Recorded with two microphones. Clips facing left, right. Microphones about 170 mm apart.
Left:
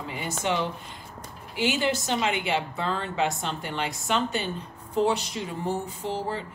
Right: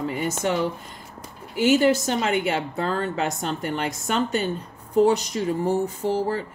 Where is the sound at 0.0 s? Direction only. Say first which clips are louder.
Right 8 dB; 45° right (ahead or behind).